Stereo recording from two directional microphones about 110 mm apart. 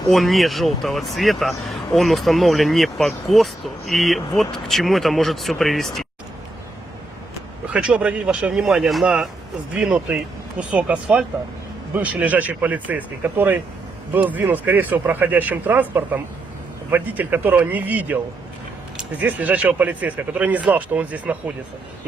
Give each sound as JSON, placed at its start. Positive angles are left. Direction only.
{"t": 0.1, "sound": "speech", "side_deg": 0}
{"t": 7.7, "sound": "speech", "side_deg": -10}